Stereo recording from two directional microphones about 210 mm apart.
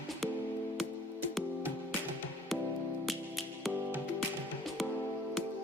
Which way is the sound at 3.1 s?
Centre (ahead or behind).